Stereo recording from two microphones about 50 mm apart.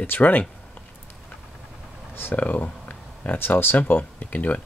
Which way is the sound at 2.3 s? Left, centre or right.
Left.